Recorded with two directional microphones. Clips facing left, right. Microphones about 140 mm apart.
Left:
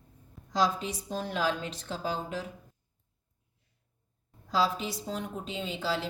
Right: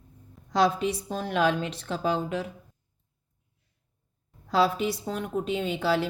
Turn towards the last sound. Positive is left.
turn(degrees=-60)  # may be behind; listen again after turning